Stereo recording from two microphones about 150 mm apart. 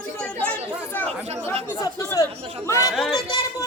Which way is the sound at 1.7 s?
20° left (ahead or behind).